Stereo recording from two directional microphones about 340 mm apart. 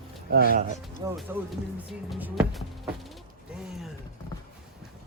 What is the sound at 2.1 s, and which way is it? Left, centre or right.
Music, centre.